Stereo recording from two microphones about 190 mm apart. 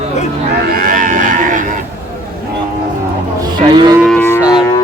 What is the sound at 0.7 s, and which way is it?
Cattle, 45° right (ahead or behind).